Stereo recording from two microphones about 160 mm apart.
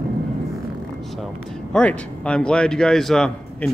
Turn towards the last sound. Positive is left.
turn(degrees=5)  # may be behind; listen again after turning